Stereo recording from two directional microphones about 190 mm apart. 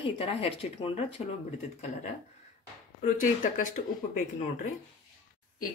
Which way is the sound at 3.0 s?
45° left (ahead or behind).